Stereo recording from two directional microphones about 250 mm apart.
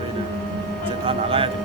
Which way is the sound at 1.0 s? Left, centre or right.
Right.